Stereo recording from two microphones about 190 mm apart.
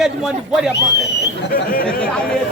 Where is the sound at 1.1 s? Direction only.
60° left (ahead or behind).